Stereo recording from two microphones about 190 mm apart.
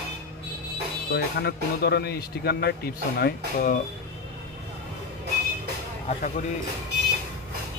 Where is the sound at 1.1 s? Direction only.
60° left (ahead or behind).